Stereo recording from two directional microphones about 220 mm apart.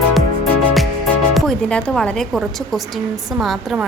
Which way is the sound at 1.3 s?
5° left (ahead or behind).